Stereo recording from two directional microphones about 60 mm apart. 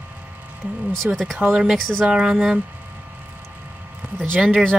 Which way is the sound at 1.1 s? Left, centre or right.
Right.